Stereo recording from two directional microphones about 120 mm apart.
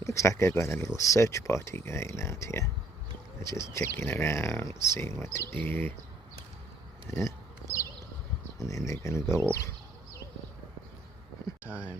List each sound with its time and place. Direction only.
0.0 s speech: 25° left (ahead or behind)
7.1 s a sound: 25° left (ahead or behind)
8.5 s speech: 25° left (ahead or behind)
11.6 s speech: 15° right (ahead or behind)